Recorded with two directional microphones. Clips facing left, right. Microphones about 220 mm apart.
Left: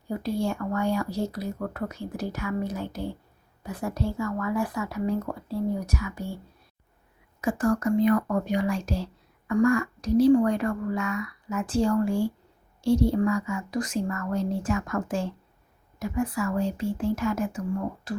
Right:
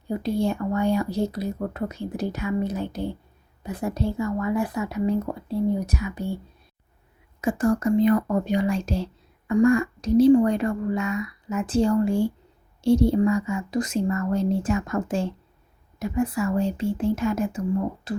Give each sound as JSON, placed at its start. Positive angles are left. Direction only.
{"t": 0.1, "sound": "speech", "side_deg": -20}
{"t": 7.4, "sound": "speech", "side_deg": -25}